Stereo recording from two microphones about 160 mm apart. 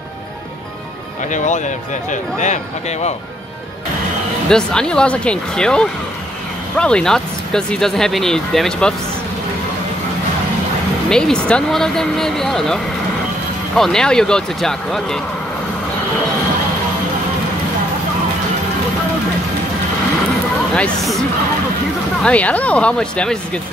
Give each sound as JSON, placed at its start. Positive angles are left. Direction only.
{"t": 1.3, "sound": "speech", "side_deg": 50}
{"t": 4.5, "sound": "speech", "side_deg": 5}
{"t": 11.1, "sound": "speech", "side_deg": 5}
{"t": 20.7, "sound": "speech", "side_deg": 5}
{"t": 22.2, "sound": "speech", "side_deg": 10}